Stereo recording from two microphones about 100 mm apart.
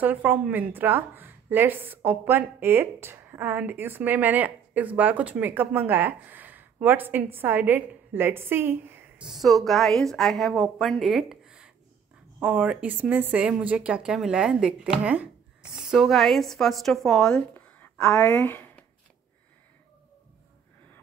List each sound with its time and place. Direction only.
0.0 s a woman's voice: 15° right (ahead or behind)
9.2 s speech: centre (ahead or behind); by 18.9 s 20° left (ahead or behind)